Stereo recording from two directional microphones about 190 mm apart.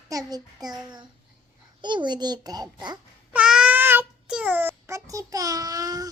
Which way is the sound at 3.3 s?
5° right (ahead or behind).